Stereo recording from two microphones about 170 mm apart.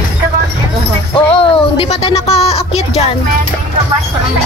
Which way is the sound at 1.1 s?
35° left (ahead or behind).